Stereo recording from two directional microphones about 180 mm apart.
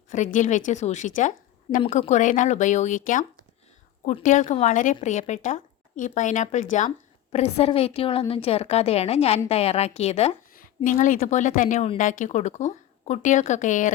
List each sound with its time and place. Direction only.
0.3 s a woman's voice: 45° left (ahead or behind)